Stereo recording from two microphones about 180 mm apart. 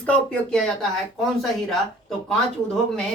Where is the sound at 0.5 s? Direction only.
Centre (ahead or behind).